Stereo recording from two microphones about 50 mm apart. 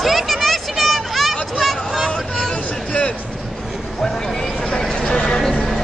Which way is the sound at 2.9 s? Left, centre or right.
Left.